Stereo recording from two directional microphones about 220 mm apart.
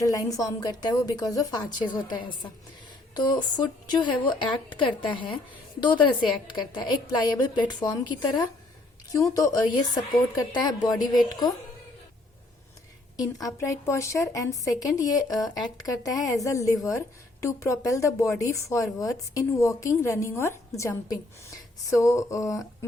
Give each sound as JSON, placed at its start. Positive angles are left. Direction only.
{"t": 0.0, "sound": "a woman's voice", "side_deg": 15}
{"t": 13.1, "sound": "a woman's voice", "side_deg": 15}